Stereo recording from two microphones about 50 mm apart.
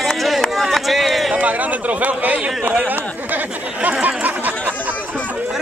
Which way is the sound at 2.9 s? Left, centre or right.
Right.